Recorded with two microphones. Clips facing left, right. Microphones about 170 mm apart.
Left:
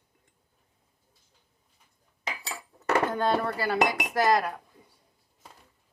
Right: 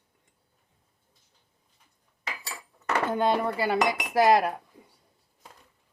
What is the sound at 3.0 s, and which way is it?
Speech, 20° right (ahead or behind).